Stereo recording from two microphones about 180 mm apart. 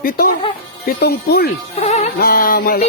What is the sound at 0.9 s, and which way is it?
Music, 65° left (ahead or behind).